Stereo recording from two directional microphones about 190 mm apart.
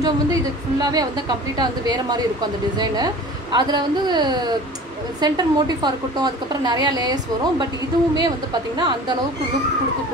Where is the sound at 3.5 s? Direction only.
20° right (ahead or behind).